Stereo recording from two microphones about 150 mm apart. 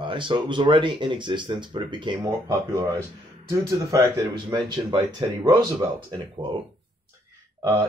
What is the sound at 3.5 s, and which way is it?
Speech, 20° right (ahead or behind).